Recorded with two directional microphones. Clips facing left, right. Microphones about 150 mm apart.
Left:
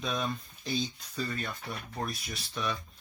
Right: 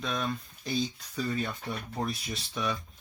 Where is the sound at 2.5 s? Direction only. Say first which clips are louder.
Right 2 dB; 10° right (ahead or behind).